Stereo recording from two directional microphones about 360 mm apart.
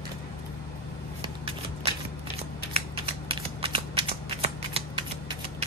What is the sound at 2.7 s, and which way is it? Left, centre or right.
Shuffling cards, centre.